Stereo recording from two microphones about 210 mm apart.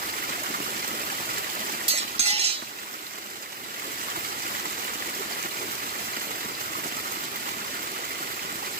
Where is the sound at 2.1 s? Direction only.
30° right (ahead or behind).